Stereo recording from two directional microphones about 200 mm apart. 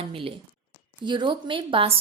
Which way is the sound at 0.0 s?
25° right (ahead or behind).